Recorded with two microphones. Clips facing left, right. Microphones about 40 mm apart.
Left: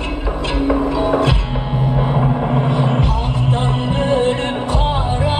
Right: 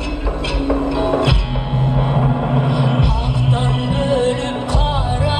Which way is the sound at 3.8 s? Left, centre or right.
Left.